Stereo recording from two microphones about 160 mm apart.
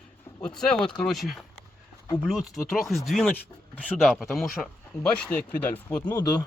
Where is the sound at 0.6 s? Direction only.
5° left (ahead or behind).